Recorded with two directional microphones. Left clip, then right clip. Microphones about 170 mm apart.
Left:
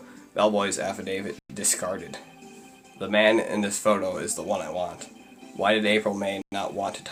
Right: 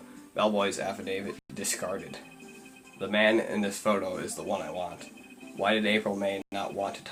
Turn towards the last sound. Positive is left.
turn(degrees=40)  # may be behind; listen again after turning